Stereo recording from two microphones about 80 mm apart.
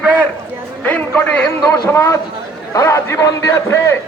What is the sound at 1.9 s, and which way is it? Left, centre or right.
A man's voice, left.